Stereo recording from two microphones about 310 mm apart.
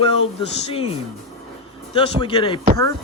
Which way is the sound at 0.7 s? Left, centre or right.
Centre.